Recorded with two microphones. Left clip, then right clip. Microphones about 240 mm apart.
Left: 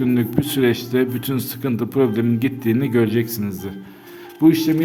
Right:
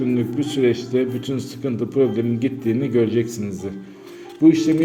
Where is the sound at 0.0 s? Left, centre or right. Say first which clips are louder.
Left 1 dB; left.